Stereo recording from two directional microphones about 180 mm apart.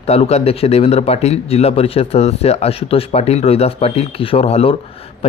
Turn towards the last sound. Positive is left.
turn(degrees=35)  # may be behind; listen again after turning